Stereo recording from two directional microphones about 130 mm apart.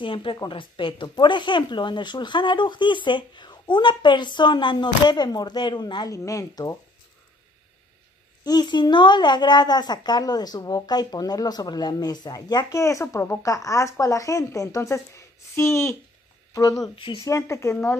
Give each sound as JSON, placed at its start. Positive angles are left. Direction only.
{"t": 0.0, "sound": "speech", "side_deg": 40}
{"t": 8.5, "sound": "a woman's voice", "side_deg": 35}
{"t": 16.9, "sound": "speech", "side_deg": 45}
{"t": 17.2, "sound": "a woman's voice", "side_deg": 25}